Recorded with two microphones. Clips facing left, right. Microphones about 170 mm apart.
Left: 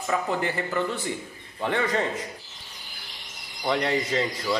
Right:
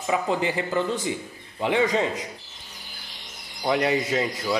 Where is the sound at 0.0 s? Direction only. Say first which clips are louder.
Right 2 dB; 15° right (ahead or behind).